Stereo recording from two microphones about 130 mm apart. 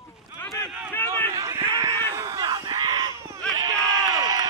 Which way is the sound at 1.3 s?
25° right (ahead or behind).